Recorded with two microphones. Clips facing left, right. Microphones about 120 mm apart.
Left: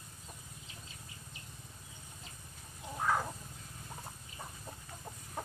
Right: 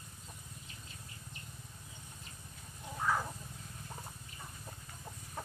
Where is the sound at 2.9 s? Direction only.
15° left (ahead or behind).